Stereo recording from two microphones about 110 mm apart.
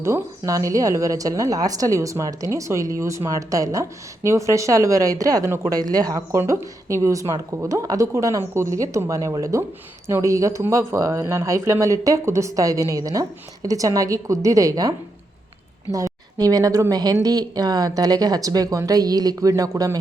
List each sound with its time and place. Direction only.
0.0 s a woman's voice: 30° right (ahead or behind)